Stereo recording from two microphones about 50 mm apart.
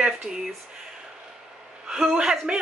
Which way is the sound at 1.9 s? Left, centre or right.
Centre.